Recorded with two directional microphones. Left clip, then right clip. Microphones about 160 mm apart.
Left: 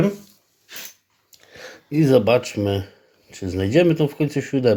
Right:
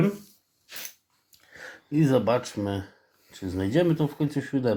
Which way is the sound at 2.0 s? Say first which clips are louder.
Left 8 dB; 65° left (ahead or behind).